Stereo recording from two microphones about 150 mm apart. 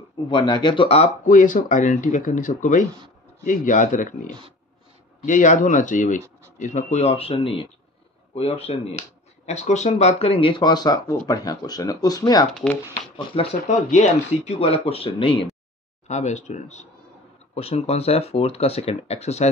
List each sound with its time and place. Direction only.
0.3 s speech: 30° left (ahead or behind)
1.2 s speech: 60° left (ahead or behind); by 12.4 s 25° left (ahead or behind)
13.4 s speech: 35° left (ahead or behind)
13.7 s speech: 50° left (ahead or behind)
16.1 s speech: 50° left (ahead or behind)